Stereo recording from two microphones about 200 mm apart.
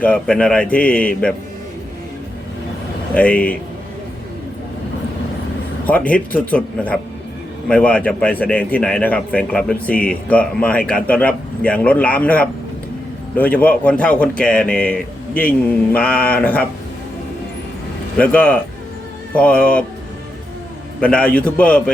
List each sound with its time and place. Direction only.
0.0 s a man's voice: 5° left (ahead or behind)
3.2 s a man's voice: 5° left (ahead or behind)
5.8 s a man's voice: 5° left (ahead or behind)
18.2 s a man's voice: 5° left (ahead or behind)
21.0 s a man's voice: 5° left (ahead or behind)